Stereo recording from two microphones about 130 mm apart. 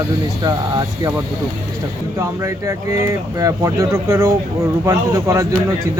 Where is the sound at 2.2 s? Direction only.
25° right (ahead or behind).